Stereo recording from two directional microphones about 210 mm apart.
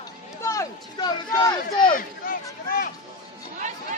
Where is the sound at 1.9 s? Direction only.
45° left (ahead or behind).